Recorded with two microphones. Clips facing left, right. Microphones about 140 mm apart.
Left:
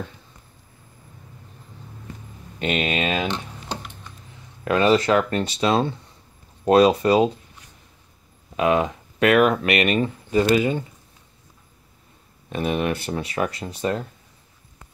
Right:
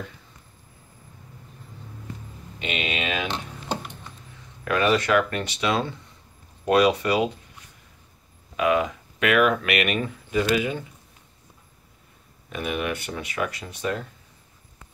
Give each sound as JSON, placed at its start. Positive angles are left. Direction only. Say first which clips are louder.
{"t": 2.6, "sound": "speech", "louder": "left 6 dB", "side_deg": 40}
{"t": 3.3, "sound": "music", "louder": "left 1 dB", "side_deg": -5}
{"t": 4.6, "sound": "speech", "louder": "left 4 dB", "side_deg": 30}
{"t": 8.5, "sound": "speech", "louder": "left 2 dB", "side_deg": 30}
{"t": 12.4, "sound": "speech", "louder": "left 5 dB", "side_deg": 30}